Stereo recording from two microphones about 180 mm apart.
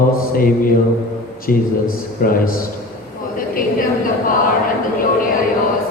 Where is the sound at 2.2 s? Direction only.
55° left (ahead or behind).